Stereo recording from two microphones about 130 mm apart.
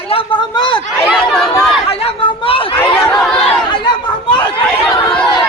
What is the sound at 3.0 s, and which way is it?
Speech, centre (ahead or behind).